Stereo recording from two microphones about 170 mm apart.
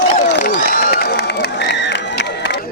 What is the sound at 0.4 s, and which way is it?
Run, 60° left (ahead or behind).